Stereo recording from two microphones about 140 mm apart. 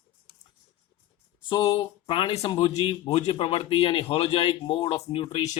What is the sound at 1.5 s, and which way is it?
Speech, 35° left (ahead or behind).